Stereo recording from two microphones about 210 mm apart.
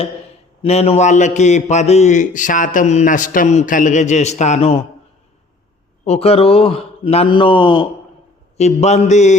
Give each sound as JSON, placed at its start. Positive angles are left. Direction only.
{"t": 0.6, "sound": "a man's voice", "side_deg": 30}
{"t": 6.1, "sound": "a man's voice", "side_deg": 30}
{"t": 8.5, "sound": "a man's voice", "side_deg": 30}